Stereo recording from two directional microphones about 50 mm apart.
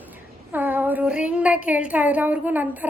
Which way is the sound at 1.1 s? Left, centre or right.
Right.